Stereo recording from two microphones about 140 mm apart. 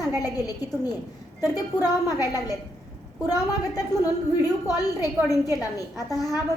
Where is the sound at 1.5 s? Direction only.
25° left (ahead or behind).